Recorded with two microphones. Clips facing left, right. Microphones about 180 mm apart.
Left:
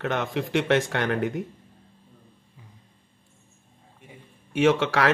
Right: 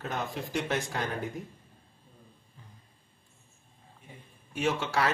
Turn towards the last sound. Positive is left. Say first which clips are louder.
# left 8 dB
turn(degrees=90)